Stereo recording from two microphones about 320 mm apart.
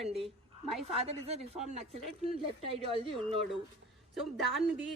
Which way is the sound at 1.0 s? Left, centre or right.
Centre.